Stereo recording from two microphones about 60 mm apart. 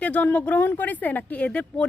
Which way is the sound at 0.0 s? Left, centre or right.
Left.